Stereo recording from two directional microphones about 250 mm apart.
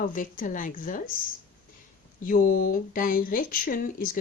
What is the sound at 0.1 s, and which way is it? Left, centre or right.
Speech, left.